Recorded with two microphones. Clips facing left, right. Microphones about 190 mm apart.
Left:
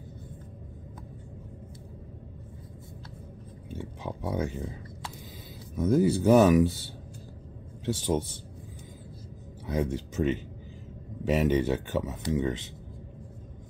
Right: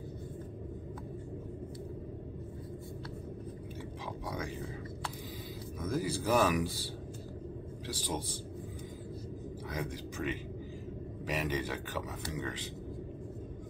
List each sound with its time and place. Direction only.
3.7 s speech: 25° left (ahead or behind)
5.8 s speech: 25° left (ahead or behind)
9.7 s speech: 25° left (ahead or behind)